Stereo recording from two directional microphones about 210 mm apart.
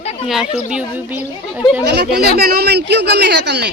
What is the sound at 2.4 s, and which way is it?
Speech, 45° right (ahead or behind).